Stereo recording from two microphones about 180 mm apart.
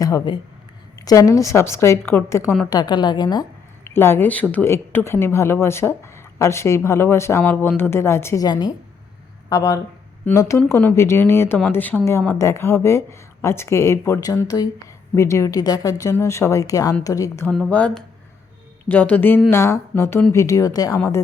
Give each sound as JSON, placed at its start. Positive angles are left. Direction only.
{"t": 0.0, "sound": "a woman's voice", "side_deg": 20}
{"t": 3.8, "sound": "a woman's voice", "side_deg": 10}
{"t": 17.5, "sound": "a woman's voice", "side_deg": 5}